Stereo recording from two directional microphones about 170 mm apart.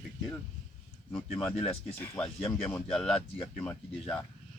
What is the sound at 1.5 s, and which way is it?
Speech, 35° left (ahead or behind).